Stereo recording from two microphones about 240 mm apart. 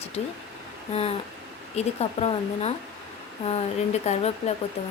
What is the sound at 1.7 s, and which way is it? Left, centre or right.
A woman's voice, left.